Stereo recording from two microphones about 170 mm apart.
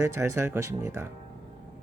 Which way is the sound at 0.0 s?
15° right (ahead or behind).